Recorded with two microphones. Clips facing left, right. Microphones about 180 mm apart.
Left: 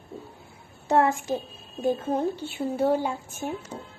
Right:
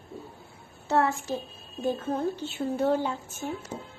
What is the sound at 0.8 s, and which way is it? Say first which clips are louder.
A woman's voice: left 3 dB; 15° left (ahead or behind).